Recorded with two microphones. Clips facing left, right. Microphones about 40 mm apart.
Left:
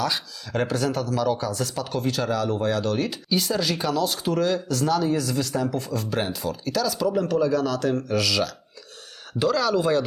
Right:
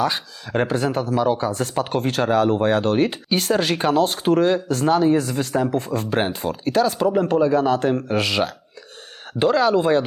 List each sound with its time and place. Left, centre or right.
0.0 s speech: right